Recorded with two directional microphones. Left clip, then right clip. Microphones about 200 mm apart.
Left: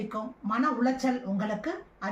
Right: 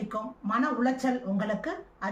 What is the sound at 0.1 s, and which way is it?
A woman's voice, 5° right (ahead or behind).